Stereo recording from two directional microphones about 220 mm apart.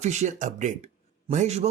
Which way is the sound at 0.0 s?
30° right (ahead or behind).